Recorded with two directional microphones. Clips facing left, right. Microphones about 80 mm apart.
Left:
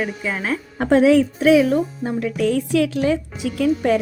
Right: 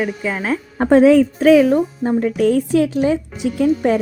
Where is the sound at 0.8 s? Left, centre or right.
Right.